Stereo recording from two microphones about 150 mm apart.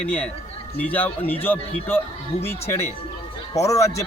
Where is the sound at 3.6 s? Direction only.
20° left (ahead or behind).